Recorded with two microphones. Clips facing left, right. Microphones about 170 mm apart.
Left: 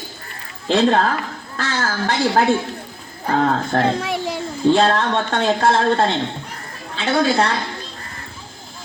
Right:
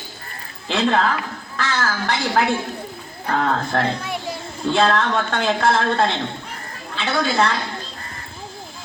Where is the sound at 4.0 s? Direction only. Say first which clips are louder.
Left 5 dB; 90° left.